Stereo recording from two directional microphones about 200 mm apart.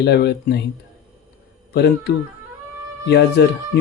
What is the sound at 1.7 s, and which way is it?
Speech, 55° left (ahead or behind).